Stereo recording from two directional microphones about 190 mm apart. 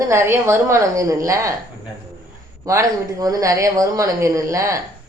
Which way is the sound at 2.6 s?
15° right (ahead or behind).